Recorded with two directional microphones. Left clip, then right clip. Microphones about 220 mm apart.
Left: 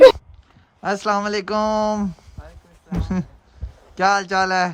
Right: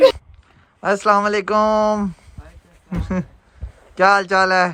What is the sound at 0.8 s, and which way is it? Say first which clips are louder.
Speech: right 5 dB; 10° left (ahead or behind).